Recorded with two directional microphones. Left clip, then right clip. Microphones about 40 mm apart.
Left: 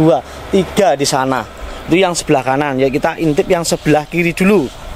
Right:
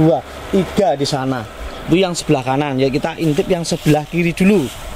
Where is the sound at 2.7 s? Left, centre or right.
Left.